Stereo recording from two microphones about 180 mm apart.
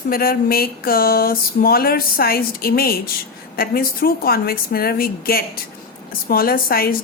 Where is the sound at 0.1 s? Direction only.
55° left (ahead or behind).